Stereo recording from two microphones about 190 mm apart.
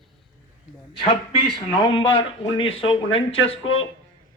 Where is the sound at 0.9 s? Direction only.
30° left (ahead or behind).